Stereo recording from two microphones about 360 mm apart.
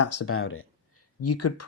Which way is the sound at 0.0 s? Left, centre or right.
Left.